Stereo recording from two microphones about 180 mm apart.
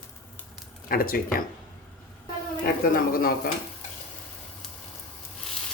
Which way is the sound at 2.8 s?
55° left (ahead or behind).